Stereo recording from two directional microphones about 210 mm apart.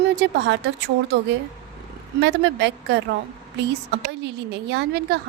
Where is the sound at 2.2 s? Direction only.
55° right (ahead or behind).